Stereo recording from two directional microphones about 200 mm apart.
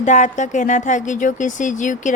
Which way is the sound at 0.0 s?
35° left (ahead or behind).